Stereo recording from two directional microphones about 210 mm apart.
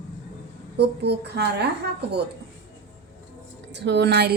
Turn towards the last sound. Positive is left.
turn(degrees=-50)  # may be behind; listen again after turning